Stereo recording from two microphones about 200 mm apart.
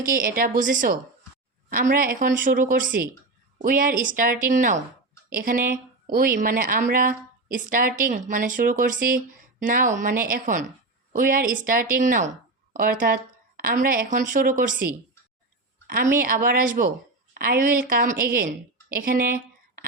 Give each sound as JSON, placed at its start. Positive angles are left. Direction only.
{"t": 0.0, "sound": "a woman's voice", "side_deg": -45}
{"t": 16.2, "sound": "a woman's voice", "side_deg": -45}